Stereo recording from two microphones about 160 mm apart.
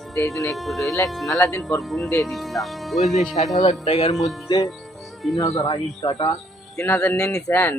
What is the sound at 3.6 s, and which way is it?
Speech, 40° left (ahead or behind).